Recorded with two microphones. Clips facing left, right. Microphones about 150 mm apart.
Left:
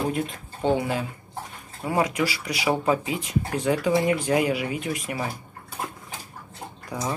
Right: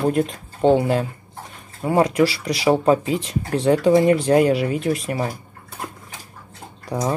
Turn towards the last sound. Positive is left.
turn(degrees=-30)  # may be behind; listen again after turning